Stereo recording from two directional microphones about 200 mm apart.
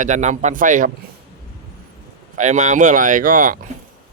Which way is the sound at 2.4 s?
35° right (ahead or behind).